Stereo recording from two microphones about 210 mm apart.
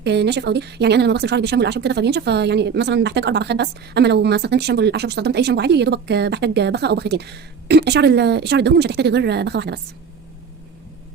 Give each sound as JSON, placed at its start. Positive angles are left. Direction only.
{"t": 0.0, "sound": "speech", "side_deg": -55}